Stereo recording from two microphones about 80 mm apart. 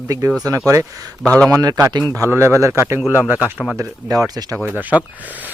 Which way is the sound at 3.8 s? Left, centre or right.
Right.